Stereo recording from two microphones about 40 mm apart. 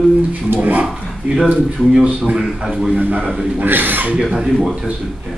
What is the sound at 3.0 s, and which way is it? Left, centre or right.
Speech, right.